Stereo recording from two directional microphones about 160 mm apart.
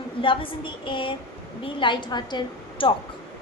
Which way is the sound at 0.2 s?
30° left (ahead or behind).